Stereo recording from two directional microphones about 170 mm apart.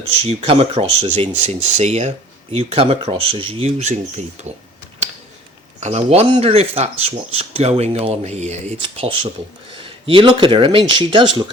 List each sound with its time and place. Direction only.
0.2 s speech: 35° right (ahead or behind)
5.8 s speech: 40° right (ahead or behind)